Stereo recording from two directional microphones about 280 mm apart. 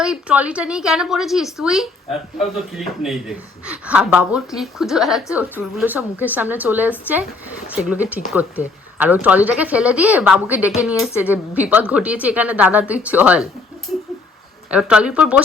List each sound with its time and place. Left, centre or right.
0.0 s a woman's voice: centre
14.7 s a woman's voice: centre